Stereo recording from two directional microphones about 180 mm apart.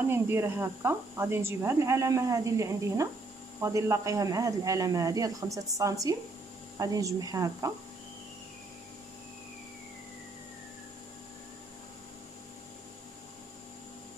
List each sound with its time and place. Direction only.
0.1 s speech: 15° right (ahead or behind)